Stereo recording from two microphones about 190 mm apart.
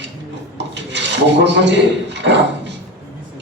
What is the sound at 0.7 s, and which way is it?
A man's voice, 65° right (ahead or behind).